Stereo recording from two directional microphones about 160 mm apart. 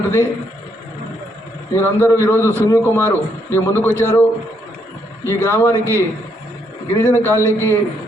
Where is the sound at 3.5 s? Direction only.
15° left (ahead or behind).